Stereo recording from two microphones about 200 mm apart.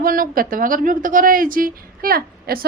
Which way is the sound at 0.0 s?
45° right (ahead or behind).